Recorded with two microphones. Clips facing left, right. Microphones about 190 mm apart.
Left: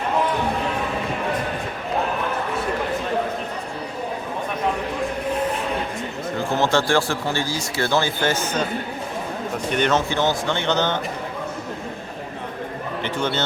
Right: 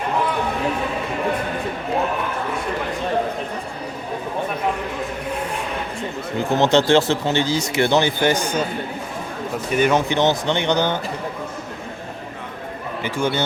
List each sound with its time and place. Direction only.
6.6 s speech: 20° right (ahead or behind)
9.7 s a man's voice: 5° right (ahead or behind)
10.1 s a man's voice: 20° right (ahead or behind)
13.1 s a man's voice: 10° right (ahead or behind)